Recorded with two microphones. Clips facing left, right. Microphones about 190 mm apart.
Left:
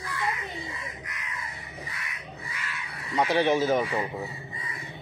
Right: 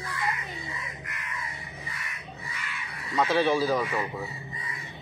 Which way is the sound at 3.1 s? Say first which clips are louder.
Left 1 dB; 20° left (ahead or behind).